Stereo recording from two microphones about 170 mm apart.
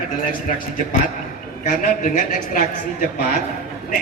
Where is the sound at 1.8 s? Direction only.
55° left (ahead or behind).